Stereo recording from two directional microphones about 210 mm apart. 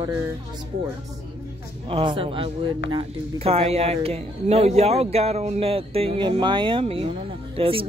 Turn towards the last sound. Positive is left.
turn(degrees=-25)  # may be behind; listen again after turning